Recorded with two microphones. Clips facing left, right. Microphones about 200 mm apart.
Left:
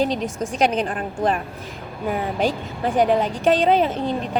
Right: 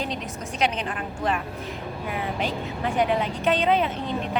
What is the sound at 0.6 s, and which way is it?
Speech, 40° left (ahead or behind).